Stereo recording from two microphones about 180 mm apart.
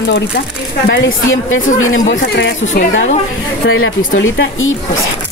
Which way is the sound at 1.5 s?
90° left.